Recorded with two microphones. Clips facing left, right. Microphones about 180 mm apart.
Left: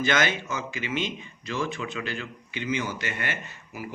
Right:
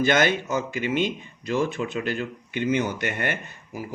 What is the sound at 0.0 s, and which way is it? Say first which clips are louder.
Speech: right 4 dB; 50° right (ahead or behind).